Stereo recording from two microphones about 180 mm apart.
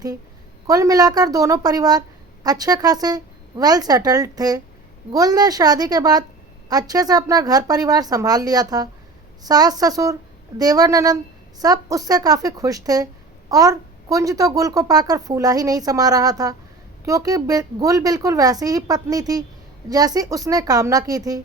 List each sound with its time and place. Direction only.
0.7 s a woman's voice: 20° right (ahead or behind)